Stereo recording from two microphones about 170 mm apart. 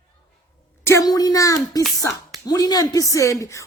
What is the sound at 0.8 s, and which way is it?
A woman's voice, 20° left (ahead or behind).